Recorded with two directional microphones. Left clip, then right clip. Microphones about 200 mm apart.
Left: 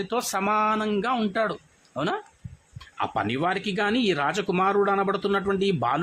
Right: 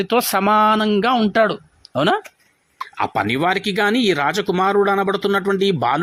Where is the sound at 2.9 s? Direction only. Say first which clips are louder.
Right 7 dB; 25° right (ahead or behind).